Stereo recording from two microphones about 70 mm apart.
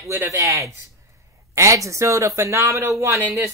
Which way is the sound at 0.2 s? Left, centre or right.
Right.